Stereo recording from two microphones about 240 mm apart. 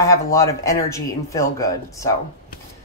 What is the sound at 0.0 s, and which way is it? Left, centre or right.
Speech, centre.